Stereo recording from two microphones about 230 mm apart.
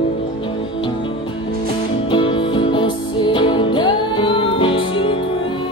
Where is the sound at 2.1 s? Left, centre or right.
Left.